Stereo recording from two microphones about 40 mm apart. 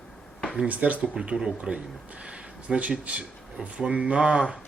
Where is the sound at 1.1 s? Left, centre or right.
Right.